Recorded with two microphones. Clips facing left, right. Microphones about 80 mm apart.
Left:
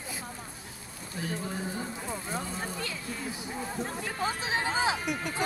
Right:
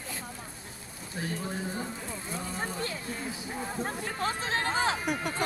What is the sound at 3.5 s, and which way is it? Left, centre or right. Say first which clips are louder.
Speech: right 1 dB; centre.